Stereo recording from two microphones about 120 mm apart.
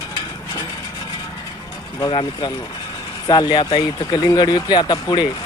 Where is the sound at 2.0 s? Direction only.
40° left (ahead or behind).